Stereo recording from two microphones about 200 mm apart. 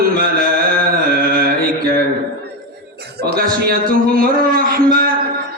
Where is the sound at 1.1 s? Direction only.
45° right (ahead or behind).